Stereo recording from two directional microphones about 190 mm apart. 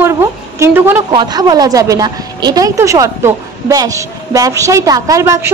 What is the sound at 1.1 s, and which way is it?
A woman's voice, 20° right (ahead or behind).